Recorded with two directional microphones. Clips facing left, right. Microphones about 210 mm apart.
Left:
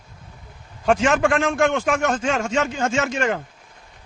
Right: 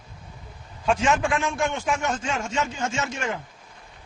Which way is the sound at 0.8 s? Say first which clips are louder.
Left 5 dB; 65° left (ahead or behind).